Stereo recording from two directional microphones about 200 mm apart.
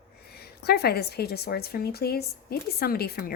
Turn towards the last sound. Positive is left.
turn(degrees=50)  # may be behind; listen again after turning